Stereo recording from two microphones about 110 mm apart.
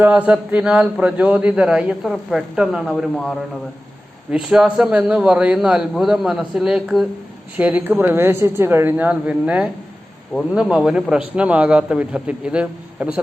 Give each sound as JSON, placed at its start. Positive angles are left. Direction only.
{"t": 0.0, "sound": "a man's voice", "side_deg": -10}
{"t": 4.3, "sound": "a man's voice", "side_deg": -5}